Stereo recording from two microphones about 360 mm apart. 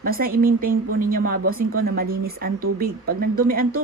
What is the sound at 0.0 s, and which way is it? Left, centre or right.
Speech, right.